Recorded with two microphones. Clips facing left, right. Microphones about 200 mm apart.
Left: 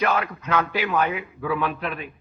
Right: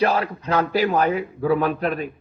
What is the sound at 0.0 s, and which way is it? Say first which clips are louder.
A woman's voice: right 3 dB; 35° right (ahead or behind).